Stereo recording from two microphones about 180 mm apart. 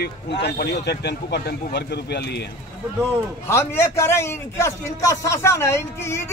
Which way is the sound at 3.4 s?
15° left (ahead or behind).